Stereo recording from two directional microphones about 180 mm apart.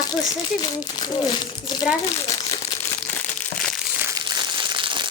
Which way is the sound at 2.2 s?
30° left (ahead or behind).